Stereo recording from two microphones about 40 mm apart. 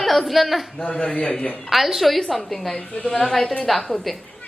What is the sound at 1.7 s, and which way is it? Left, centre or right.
Speech, centre.